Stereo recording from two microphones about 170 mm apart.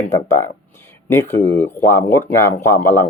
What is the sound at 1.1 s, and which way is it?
Speech, 15° left (ahead or behind).